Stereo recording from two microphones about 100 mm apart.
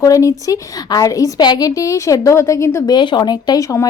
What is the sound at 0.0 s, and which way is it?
Speech, 35° left (ahead or behind).